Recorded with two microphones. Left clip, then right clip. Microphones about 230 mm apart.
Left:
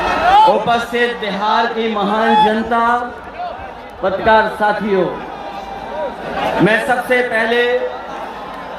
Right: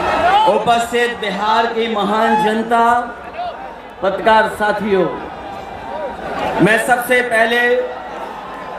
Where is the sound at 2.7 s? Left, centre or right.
Right.